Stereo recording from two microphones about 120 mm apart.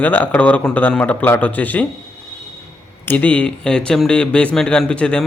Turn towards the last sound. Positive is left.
turn(degrees=10)  # may be behind; listen again after turning